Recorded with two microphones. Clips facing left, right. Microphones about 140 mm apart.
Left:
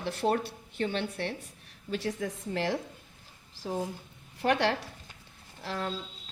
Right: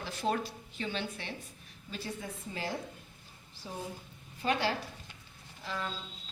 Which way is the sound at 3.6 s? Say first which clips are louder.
Left 8 dB; 70° left (ahead or behind).